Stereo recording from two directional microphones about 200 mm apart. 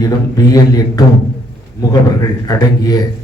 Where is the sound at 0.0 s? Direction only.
20° left (ahead or behind).